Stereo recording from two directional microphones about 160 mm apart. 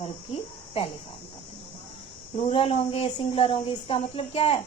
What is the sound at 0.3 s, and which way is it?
Speech, 40° left (ahead or behind).